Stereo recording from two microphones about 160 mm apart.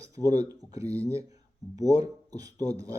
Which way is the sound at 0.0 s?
20° right (ahead or behind).